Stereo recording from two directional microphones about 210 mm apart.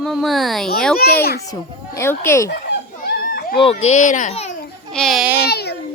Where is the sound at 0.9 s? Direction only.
45° left (ahead or behind).